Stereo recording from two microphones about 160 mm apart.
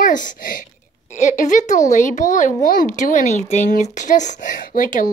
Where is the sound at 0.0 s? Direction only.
55° left (ahead or behind).